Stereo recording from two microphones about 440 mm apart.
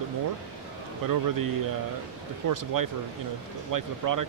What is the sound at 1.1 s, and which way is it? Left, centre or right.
Speech, right.